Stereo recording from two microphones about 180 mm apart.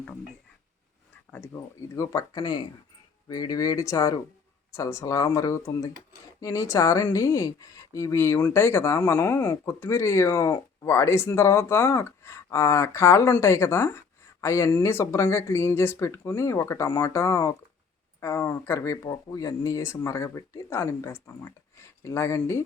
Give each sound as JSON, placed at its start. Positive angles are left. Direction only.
{"t": 1.3, "sound": "speech", "side_deg": 15}